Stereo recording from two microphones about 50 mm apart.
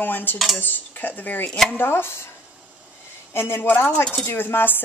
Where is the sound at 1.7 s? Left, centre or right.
Left.